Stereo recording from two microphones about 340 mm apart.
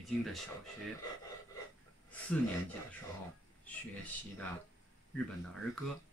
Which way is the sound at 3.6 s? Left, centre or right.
Centre.